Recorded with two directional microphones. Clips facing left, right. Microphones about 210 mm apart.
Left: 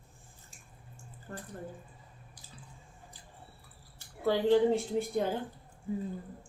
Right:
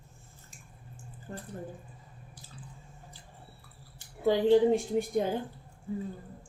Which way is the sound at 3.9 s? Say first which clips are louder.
Right 3 dB; 15° right (ahead or behind).